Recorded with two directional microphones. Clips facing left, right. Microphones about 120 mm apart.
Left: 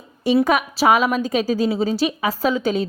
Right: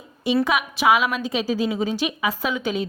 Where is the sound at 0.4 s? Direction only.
45° left (ahead or behind).